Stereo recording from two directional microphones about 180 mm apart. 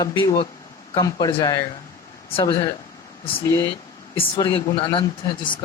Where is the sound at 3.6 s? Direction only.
30° left (ahead or behind).